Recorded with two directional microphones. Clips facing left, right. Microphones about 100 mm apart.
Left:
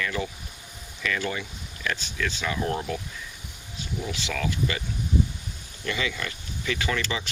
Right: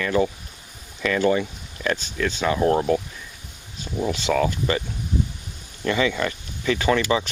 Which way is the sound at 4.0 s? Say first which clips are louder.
Right 10 dB; 40° right (ahead or behind).